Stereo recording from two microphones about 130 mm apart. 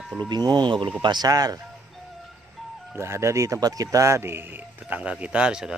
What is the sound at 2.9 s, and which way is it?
Speech, 20° right (ahead or behind).